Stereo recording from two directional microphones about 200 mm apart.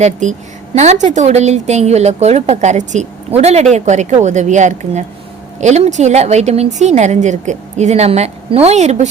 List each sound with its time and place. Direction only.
0.0 s a woman's voice: 35° right (ahead or behind)